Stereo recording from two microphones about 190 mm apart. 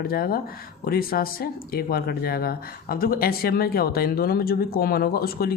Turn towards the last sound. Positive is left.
turn(degrees=55)  # may be behind; listen again after turning